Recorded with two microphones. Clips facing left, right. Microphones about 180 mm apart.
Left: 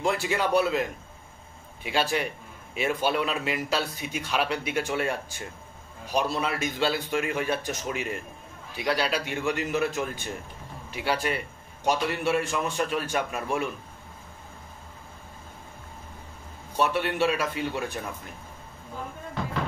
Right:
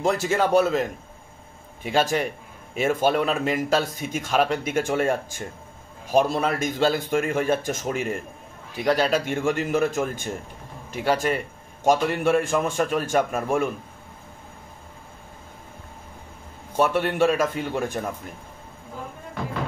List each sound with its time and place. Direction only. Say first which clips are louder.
0.0 s speech: right 4 dB; 45° right (ahead or behind)
16.7 s speech: right 4 dB; 50° right (ahead or behind)